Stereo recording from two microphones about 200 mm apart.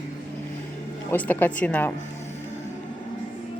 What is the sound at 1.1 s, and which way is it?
Speech, 10° left (ahead or behind).